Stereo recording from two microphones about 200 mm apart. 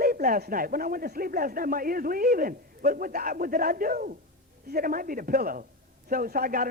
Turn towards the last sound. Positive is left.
turn(degrees=-45)  # may be behind; listen again after turning